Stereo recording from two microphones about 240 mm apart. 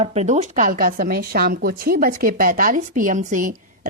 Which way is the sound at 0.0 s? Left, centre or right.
Right.